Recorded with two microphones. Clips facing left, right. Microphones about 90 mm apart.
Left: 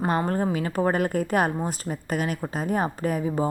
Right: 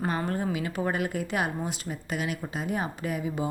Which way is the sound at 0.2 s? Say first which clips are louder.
Left 5 dB; 35° left (ahead or behind).